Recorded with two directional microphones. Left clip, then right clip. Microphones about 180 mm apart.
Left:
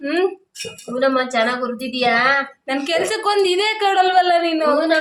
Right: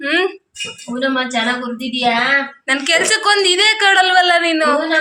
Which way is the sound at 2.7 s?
15° left (ahead or behind).